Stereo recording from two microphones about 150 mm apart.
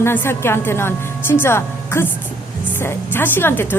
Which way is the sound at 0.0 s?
15° left (ahead or behind).